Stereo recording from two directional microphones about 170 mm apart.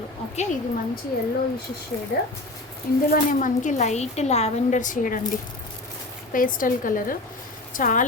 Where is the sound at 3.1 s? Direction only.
50° left (ahead or behind).